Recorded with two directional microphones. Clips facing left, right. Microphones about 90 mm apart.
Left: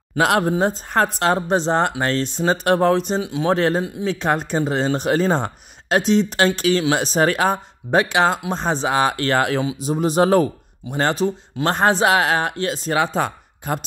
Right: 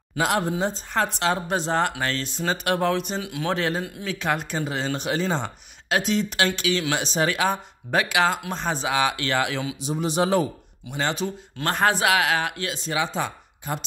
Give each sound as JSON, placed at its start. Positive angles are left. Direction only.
{"t": 0.2, "sound": "speech", "side_deg": 55}
{"t": 1.5, "sound": "speech", "side_deg": 30}
{"t": 3.5, "sound": "speech", "side_deg": 40}
{"t": 3.8, "sound": "speech", "side_deg": 25}
{"t": 11.6, "sound": "speech", "side_deg": 30}